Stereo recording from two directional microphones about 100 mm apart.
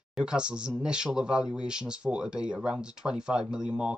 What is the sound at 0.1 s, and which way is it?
Speech, 10° right (ahead or behind).